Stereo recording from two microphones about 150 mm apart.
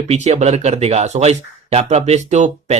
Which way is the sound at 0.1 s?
45° right (ahead or behind).